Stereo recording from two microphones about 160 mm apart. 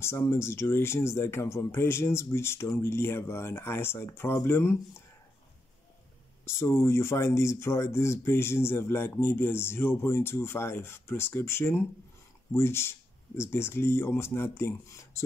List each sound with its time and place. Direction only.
0.0 s speech: 15° left (ahead or behind)
6.4 s speech: 15° left (ahead or behind)